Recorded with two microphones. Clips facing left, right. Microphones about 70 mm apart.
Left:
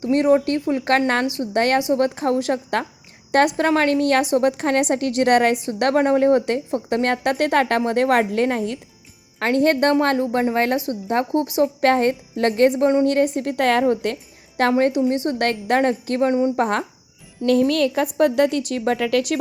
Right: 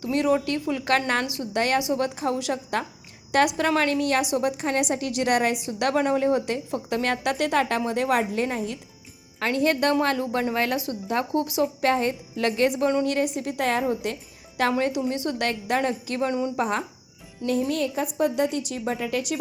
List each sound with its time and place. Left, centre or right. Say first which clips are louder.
0.0 s a woman's voice: left 6 dB; left
11.8 s a woman's voice: left 7 dB; left
12.7 s a woman's voice: left 6 dB; left
13.1 s a woman's voice: left 6 dB; left
17.4 s speech: left 7 dB; left